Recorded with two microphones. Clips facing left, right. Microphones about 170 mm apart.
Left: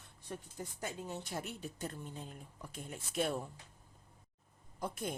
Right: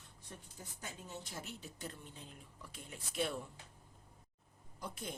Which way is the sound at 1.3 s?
45° left (ahead or behind).